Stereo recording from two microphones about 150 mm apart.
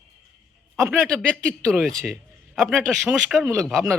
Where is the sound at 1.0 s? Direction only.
5° left (ahead or behind).